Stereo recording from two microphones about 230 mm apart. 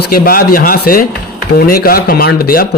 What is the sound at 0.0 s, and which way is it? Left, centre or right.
A man's voice, left.